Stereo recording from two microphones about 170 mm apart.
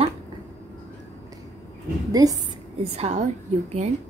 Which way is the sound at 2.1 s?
20° right (ahead or behind).